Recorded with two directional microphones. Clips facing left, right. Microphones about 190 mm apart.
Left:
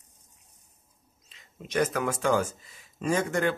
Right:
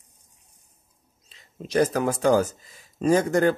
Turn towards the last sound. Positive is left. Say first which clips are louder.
# right 7 dB
turn(degrees=-40)  # may be behind; listen again after turning